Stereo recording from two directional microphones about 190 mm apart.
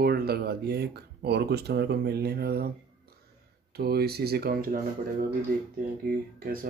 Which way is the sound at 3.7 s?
55° right (ahead or behind).